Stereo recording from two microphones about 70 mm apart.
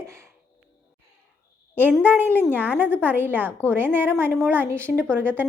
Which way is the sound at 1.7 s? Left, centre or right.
Right.